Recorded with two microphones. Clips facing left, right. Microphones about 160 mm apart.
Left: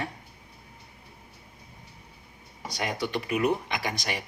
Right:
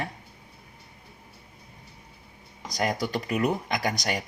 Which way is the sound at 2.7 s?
40° right (ahead or behind).